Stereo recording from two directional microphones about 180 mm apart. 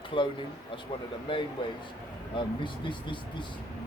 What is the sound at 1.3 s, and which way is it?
Speech, 25° left (ahead or behind).